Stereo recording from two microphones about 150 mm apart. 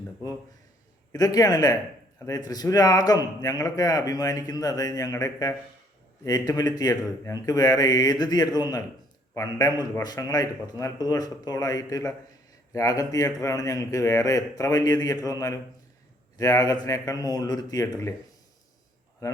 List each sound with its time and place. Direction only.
1.1 s speech: 25° left (ahead or behind)